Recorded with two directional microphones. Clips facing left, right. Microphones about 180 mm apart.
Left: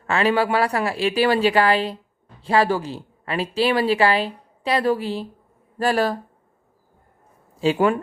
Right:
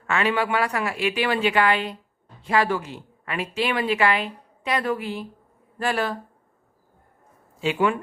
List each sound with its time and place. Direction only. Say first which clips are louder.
0.1 s speech: left 4 dB; 35° left (ahead or behind)
7.6 s speech: left 4 dB; 35° left (ahead or behind)